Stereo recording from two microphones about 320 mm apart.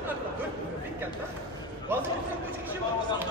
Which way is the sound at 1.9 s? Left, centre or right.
Centre.